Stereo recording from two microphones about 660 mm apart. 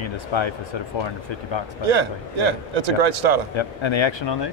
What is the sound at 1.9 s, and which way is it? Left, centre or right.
A man's voice, right.